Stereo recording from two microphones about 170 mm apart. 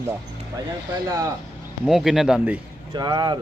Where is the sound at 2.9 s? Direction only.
25° right (ahead or behind).